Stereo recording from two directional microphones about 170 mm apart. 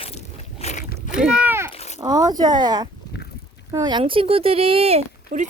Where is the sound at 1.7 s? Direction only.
40° left (ahead or behind).